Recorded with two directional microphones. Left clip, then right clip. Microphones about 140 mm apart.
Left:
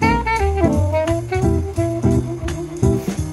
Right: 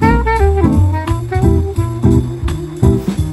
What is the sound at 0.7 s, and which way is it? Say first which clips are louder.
Music: left 1 dB; 30° right (ahead or behind).